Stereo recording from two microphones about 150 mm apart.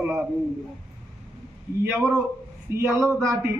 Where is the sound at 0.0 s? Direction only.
10° right (ahead or behind).